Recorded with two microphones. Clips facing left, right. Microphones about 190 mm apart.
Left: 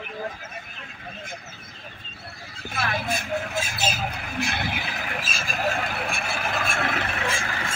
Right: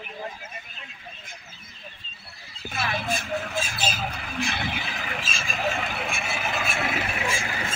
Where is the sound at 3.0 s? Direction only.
10° left (ahead or behind).